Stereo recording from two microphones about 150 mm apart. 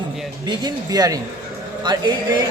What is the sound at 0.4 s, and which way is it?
A man's voice, 25° right (ahead or behind).